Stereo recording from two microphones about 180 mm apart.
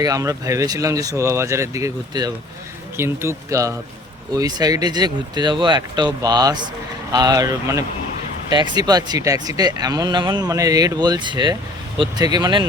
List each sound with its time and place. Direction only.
0.0 s speech: 20° right (ahead or behind)